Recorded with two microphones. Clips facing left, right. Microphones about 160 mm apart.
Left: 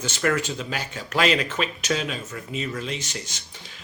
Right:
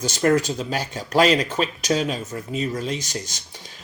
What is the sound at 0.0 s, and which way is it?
A man's voice, 35° right (ahead or behind).